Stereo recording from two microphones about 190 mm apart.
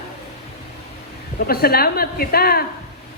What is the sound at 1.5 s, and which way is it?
A woman's voice, 55° left (ahead or behind).